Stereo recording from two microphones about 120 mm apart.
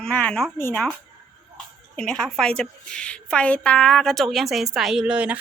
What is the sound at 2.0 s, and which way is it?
A woman's voice, 5° left (ahead or behind).